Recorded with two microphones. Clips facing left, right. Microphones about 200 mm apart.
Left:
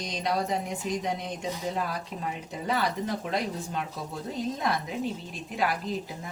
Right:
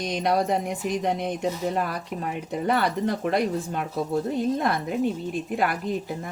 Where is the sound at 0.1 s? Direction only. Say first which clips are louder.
Right 5 dB; 60° right (ahead or behind).